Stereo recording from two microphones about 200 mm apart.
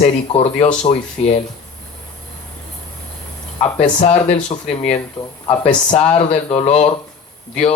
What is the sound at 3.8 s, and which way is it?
Speech, 35° left (ahead or behind).